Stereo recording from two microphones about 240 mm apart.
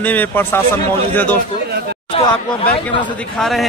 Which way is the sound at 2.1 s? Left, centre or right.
Left.